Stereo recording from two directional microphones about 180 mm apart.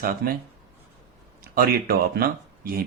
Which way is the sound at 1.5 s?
55° right (ahead or behind).